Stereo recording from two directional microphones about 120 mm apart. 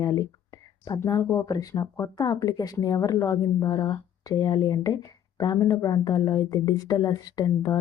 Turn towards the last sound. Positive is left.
turn(degrees=30)  # may be behind; listen again after turning